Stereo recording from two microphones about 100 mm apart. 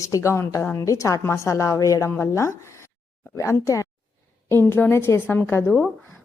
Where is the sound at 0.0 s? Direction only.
30° left (ahead or behind).